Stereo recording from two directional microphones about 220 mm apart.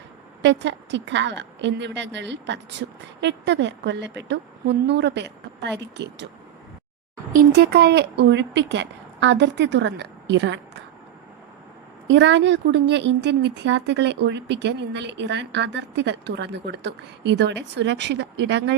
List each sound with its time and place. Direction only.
0.4 s a woman's voice: 55° right (ahead or behind)
7.5 s a woman's voice: 45° right (ahead or behind)
12.0 s a woman's voice: 55° right (ahead or behind)